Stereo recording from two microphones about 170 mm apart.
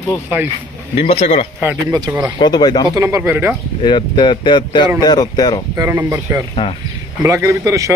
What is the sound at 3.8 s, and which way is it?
Speech, 30° left (ahead or behind).